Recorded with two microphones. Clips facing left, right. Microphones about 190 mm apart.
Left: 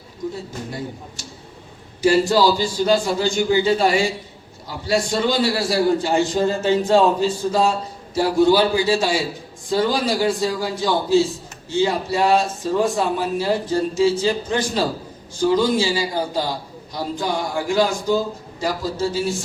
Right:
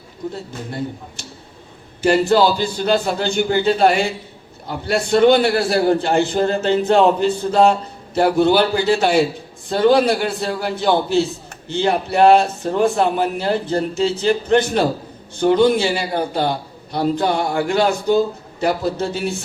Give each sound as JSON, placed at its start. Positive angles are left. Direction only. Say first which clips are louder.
{"t": 2.0, "sound": "a man's voice", "louder": "right 2 dB", "side_deg": -60}